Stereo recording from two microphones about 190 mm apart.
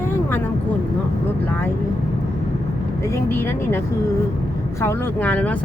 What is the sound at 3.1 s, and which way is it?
Speech, 10° left (ahead or behind).